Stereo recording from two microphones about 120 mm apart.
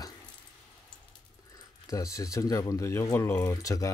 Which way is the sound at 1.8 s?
25° left (ahead or behind).